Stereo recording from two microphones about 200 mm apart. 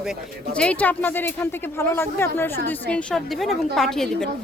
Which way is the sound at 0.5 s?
5° left (ahead or behind).